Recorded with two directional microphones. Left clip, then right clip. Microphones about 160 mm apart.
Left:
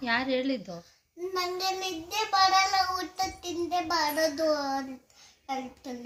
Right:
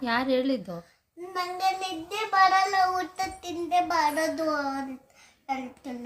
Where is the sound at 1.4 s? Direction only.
15° right (ahead or behind).